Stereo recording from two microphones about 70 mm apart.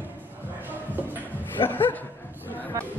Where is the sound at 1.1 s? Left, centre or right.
Left.